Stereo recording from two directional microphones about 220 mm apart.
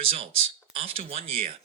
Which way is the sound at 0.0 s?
25° right (ahead or behind).